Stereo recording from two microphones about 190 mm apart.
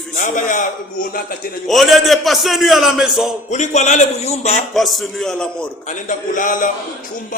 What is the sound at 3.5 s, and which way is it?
Speech, 40° left (ahead or behind).